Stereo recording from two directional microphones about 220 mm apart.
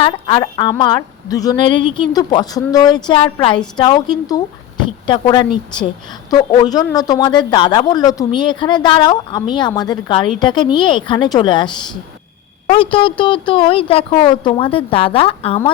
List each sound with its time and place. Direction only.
0.0 s speech: 20° left (ahead or behind)